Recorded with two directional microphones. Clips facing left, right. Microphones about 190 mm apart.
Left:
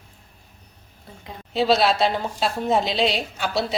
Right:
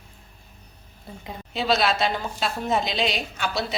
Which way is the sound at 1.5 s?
30° left (ahead or behind).